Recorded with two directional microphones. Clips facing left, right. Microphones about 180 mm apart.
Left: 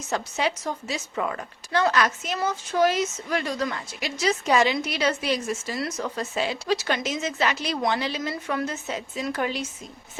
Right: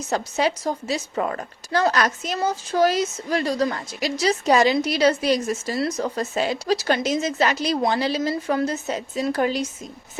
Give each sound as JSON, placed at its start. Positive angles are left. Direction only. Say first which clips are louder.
{"t": 0.1, "sound": "a woman's voice", "louder": "right 4 dB", "side_deg": -40}